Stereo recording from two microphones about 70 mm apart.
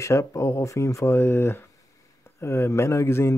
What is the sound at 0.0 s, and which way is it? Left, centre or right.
Speech, left.